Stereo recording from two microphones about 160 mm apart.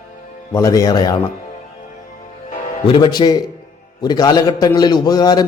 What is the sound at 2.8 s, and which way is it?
A man's voice, 30° left (ahead or behind).